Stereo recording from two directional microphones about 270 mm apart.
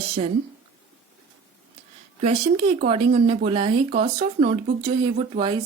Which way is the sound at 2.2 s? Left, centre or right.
Right.